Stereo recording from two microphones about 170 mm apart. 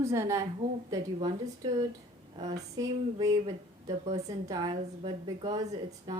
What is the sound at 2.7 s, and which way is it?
A woman's voice, 20° right (ahead or behind).